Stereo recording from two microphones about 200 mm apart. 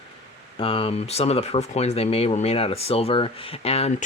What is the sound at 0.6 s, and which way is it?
Speech, 30° left (ahead or behind).